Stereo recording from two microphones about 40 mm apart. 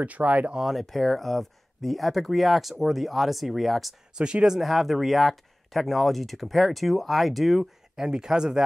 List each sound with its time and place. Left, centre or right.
0.0 s speech: right
0.6 s speech: centre
4.1 s speech: centre
4.6 s speech: centre
7.9 s speech: centre